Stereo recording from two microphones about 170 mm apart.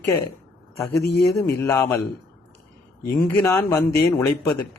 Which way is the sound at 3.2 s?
15° left (ahead or behind).